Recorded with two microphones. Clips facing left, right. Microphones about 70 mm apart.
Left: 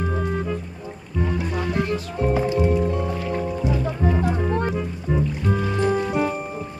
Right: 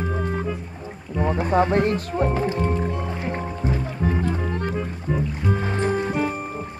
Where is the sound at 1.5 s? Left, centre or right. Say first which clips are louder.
Right 9 dB; right.